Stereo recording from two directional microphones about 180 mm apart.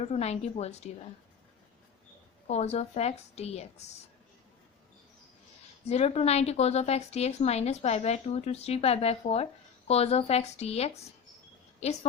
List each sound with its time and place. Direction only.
0.0 s a woman's voice: 35° left (ahead or behind)
2.5 s a woman's voice: 35° left (ahead or behind)
5.8 s a woman's voice: 35° left (ahead or behind)